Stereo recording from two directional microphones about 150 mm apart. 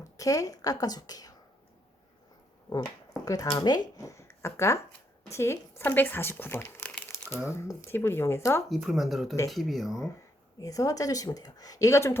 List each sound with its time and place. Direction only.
0.0 s a woman's voice: 20° left (ahead or behind)
3.2 s speech: 25° left (ahead or behind)
8.7 s speech: centre (ahead or behind)
10.6 s speech: 25° left (ahead or behind)